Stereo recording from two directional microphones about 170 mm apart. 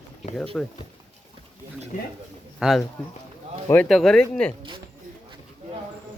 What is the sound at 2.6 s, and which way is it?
Speech, centre (ahead or behind).